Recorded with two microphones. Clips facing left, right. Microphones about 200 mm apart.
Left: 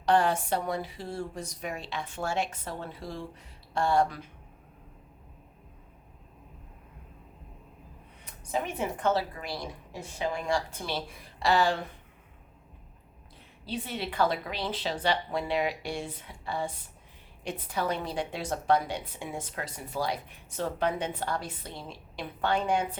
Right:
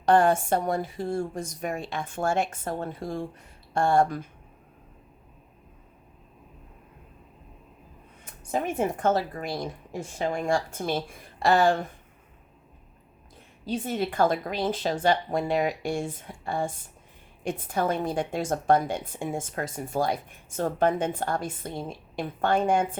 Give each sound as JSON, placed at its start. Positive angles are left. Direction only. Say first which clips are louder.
{"t": 0.0, "sound": "a woman's voice", "louder": "right 4 dB", "side_deg": -50}
{"t": 8.2, "sound": "a woman's voice", "louder": "right 3 dB", "side_deg": -50}
{"t": 13.7, "sound": "a woman's voice", "louder": "right 6 dB", "side_deg": -45}